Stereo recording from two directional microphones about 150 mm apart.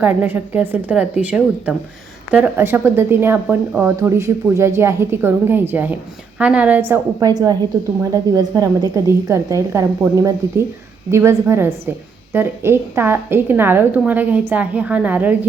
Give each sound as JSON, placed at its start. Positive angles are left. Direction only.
{"t": 0.0, "sound": "a woman's voice", "side_deg": -10}